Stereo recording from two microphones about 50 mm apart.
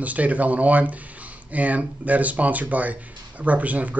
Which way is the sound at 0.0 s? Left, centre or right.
Right.